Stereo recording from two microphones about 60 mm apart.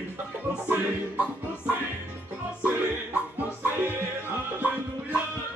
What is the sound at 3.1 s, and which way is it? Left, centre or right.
Music, right.